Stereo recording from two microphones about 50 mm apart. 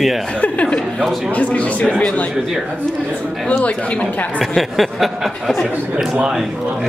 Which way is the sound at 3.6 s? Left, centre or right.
Left.